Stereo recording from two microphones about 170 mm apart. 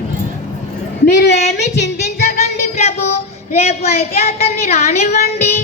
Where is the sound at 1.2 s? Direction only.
80° left.